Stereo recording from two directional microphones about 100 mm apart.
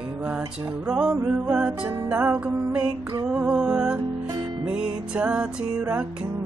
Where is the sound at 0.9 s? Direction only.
10° right (ahead or behind).